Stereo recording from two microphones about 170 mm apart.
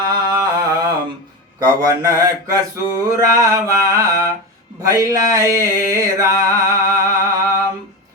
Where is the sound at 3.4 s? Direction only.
20° right (ahead or behind).